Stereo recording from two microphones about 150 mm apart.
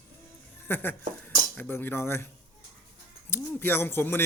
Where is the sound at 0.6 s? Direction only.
15° left (ahead or behind).